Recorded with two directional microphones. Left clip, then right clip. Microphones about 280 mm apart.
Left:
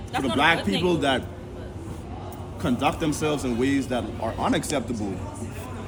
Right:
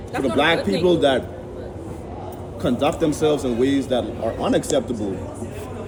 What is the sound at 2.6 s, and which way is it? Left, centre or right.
A man's voice, centre.